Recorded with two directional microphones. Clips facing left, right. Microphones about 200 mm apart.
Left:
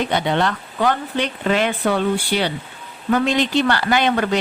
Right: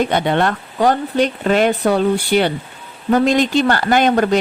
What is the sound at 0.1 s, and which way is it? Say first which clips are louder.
Speech: right 3 dB; 55° right (ahead or behind).